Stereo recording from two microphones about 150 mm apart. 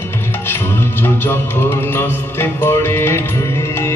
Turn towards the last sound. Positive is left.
turn(degrees=15)  # may be behind; listen again after turning